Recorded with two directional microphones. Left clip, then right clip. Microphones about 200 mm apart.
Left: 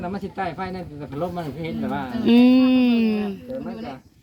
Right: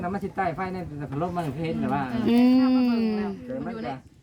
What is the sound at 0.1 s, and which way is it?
Speech, 20° right (ahead or behind).